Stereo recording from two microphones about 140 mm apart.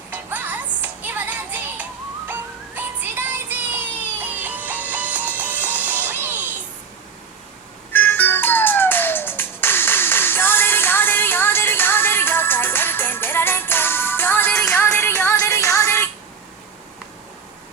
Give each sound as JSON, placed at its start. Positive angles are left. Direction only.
{"t": 0.1, "sound": "music", "side_deg": -15}
{"t": 7.9, "sound": "music", "side_deg": 15}